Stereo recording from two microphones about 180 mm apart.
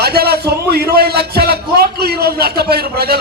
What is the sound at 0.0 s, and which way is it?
A man's voice, 60° right (ahead or behind).